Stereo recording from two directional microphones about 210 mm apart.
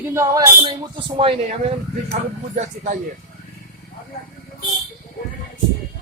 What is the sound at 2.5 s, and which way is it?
Speech, 35° right (ahead or behind).